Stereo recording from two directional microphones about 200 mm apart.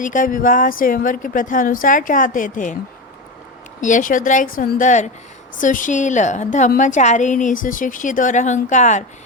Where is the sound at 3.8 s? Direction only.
40° left (ahead or behind).